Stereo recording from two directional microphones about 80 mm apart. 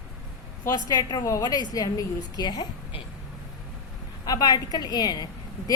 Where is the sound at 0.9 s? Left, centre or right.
Left.